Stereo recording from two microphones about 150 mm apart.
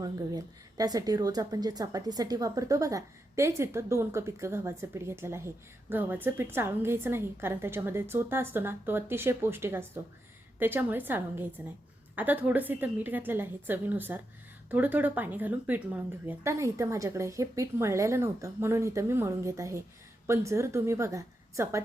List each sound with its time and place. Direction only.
0.0 s a woman's voice: 25° right (ahead or behind)